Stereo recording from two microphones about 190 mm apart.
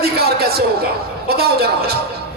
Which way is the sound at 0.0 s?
55° right (ahead or behind).